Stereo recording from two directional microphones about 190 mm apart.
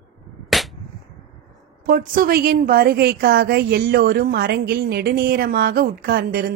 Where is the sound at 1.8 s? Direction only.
45° right (ahead or behind).